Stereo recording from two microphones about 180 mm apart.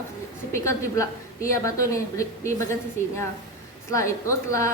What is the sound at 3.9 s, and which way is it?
Speech, 15° left (ahead or behind).